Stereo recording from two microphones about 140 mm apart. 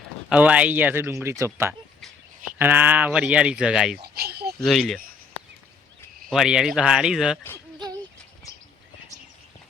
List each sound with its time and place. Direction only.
0.3 s speech: 10° right (ahead or behind)
6.3 s speech: 5° right (ahead or behind)